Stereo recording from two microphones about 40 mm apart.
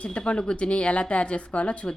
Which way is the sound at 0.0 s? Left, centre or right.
Left.